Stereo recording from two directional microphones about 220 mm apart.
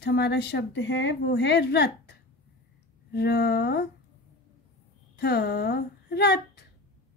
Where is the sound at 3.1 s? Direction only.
50° left (ahead or behind).